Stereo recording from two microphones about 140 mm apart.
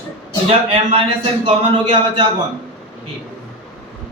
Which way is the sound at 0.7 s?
40° right (ahead or behind).